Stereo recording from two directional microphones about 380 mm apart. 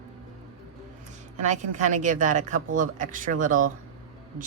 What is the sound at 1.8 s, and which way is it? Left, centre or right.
Speech, centre.